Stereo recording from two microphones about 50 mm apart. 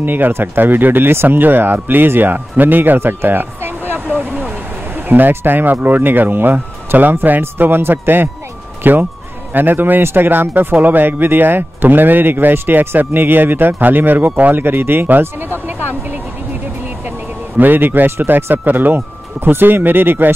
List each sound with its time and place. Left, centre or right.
0.0 s speech: right
17.6 s speech: right